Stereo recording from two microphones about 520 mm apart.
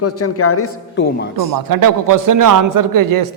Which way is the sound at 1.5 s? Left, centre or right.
Right.